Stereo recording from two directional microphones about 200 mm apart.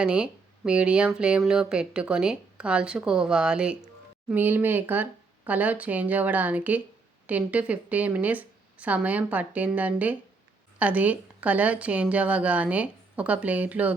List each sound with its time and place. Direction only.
0.0 s a woman's voice: 5° right (ahead or behind)